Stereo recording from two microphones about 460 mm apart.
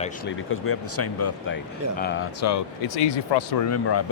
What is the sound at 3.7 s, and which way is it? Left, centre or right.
Speech, left.